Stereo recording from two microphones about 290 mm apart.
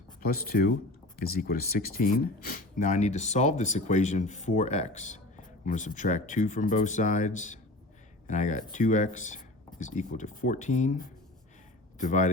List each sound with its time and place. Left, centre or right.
0.2 s speech: left